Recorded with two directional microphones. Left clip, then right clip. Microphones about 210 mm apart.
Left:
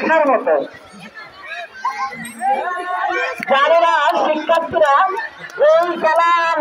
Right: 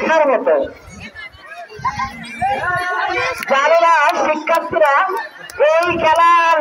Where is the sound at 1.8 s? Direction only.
55° right (ahead or behind).